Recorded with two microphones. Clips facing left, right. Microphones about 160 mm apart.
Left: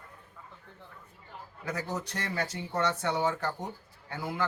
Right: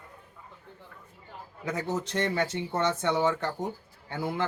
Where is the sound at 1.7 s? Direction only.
25° right (ahead or behind).